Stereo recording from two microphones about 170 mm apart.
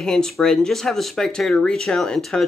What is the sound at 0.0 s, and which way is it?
Speech, 5° left (ahead or behind).